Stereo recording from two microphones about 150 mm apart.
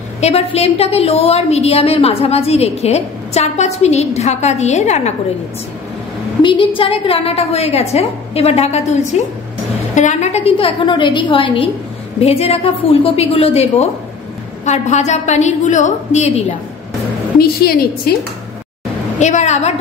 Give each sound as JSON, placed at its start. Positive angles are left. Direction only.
{"t": 0.2, "sound": "a woman's voice", "side_deg": 40}
{"t": 6.4, "sound": "a woman's voice", "side_deg": 35}
{"t": 17.4, "sound": "a woman's voice", "side_deg": 90}
{"t": 19.1, "sound": "a woman's voice", "side_deg": 50}